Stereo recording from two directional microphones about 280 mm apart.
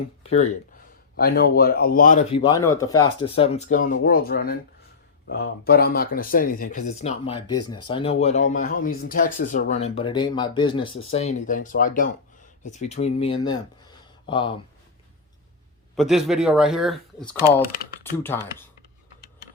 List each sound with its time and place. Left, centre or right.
0.2 s speech: left
1.1 s speech: left; by 14.5 s centre
16.0 s speech: centre